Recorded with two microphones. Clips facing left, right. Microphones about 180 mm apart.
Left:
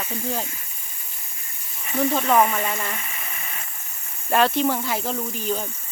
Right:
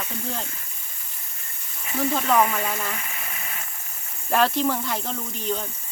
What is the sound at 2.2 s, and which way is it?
Speech, 5° left (ahead or behind).